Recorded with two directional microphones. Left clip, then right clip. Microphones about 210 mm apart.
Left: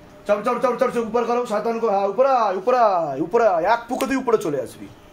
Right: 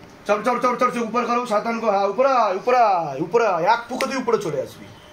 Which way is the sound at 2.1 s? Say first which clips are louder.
Left 1 dB; 15° left (ahead or behind).